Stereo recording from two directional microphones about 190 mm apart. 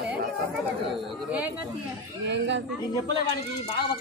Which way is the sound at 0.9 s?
5° right (ahead or behind).